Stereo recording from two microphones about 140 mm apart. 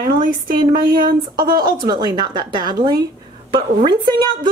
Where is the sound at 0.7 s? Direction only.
90° right.